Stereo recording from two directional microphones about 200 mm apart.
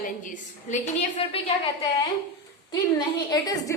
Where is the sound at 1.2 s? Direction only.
30° left (ahead or behind).